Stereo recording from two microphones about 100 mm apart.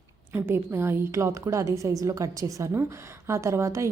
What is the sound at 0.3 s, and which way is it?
A woman's voice, 25° right (ahead or behind).